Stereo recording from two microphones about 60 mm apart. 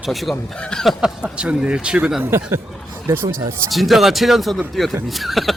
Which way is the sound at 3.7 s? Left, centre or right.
Centre.